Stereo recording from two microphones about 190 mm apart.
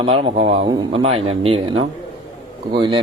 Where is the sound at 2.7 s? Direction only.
25° right (ahead or behind).